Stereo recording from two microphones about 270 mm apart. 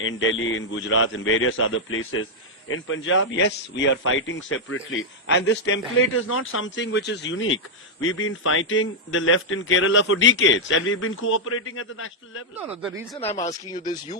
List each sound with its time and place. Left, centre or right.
0.0 s a man's voice: left
13.1 s speech: centre